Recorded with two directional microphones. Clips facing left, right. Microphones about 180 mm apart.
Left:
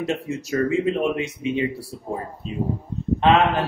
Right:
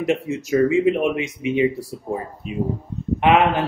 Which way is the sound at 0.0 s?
15° right (ahead or behind).